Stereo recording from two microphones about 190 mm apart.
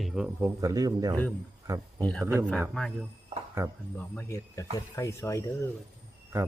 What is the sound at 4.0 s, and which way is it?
Speech, 10° left (ahead or behind).